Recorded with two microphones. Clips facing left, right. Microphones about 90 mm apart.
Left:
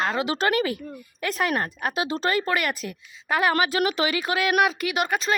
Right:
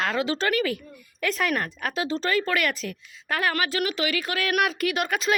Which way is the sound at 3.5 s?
20° left (ahead or behind).